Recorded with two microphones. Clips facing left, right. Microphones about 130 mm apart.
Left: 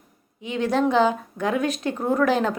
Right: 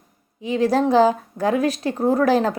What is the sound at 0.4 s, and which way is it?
A woman's voice, 35° right (ahead or behind).